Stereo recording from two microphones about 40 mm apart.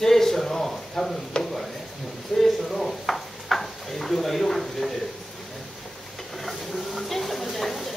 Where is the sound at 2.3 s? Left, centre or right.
Centre.